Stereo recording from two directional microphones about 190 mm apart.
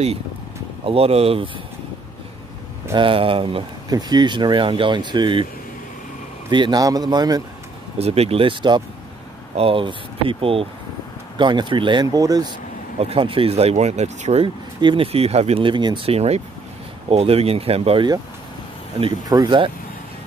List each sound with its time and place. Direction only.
0.8 s speech: 30° right (ahead or behind)
3.0 s speech: 30° right (ahead or behind)
6.5 s speech: 25° right (ahead or behind)
8.0 s speech: 30° right (ahead or behind)
13.0 s speech: 30° right (ahead or behind)